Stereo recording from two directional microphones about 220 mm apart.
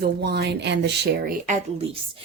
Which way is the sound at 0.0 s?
45° right (ahead or behind).